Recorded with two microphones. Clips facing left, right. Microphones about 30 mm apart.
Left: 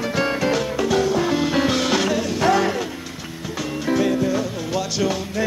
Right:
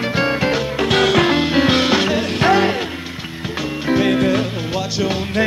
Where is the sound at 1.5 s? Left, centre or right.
Right.